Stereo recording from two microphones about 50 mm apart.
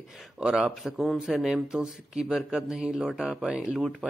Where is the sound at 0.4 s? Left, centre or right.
Centre.